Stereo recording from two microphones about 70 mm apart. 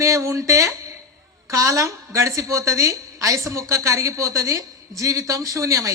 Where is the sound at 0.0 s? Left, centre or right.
Right.